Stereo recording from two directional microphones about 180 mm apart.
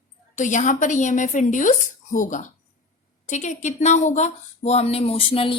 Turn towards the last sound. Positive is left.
turn(degrees=30)  # may be behind; listen again after turning